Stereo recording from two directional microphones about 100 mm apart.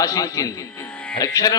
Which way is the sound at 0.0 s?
35° left (ahead or behind).